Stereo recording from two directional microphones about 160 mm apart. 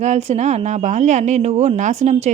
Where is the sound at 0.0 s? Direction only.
45° right (ahead or behind).